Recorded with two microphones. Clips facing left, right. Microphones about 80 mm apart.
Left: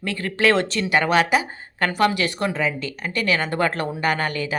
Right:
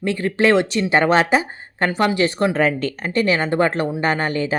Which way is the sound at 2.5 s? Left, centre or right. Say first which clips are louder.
Right 6 dB; right.